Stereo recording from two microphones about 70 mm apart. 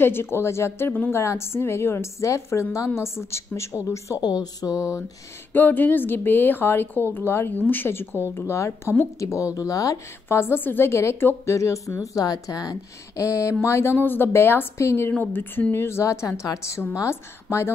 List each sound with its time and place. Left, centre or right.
0.0 s a woman's voice: left
4.2 s a sound: left
5.5 s a woman's voice: left
10.2 s a woman's voice: left